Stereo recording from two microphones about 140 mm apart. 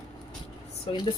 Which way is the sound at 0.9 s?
40° left (ahead or behind).